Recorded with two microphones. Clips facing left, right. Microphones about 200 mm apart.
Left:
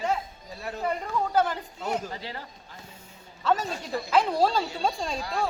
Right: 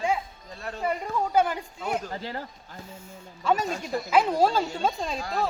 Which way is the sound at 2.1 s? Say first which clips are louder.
Right 4 dB; 45° right (ahead or behind).